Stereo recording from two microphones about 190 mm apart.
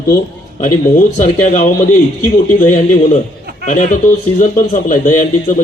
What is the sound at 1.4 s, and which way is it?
A man's voice, 40° left (ahead or behind).